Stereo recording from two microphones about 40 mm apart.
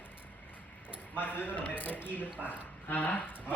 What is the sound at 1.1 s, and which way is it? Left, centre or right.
Speech, left.